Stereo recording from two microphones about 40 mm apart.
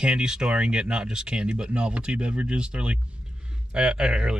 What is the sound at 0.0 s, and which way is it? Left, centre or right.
Speech, centre.